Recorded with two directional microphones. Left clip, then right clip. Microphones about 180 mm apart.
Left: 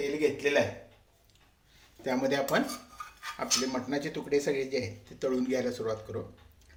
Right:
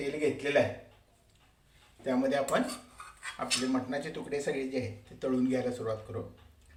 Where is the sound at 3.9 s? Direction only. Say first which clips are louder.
Left 4 dB; 45° left (ahead or behind).